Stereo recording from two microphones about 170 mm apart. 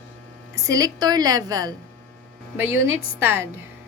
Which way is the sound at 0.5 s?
20° right (ahead or behind).